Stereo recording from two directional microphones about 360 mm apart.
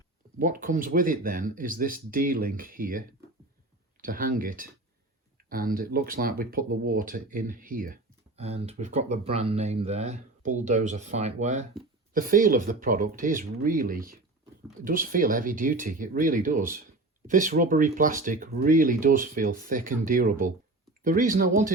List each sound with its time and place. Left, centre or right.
0.3 s speech: right
4.0 s speech: right